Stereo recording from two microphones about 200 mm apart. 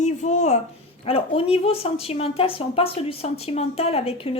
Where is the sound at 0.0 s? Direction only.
35° left (ahead or behind).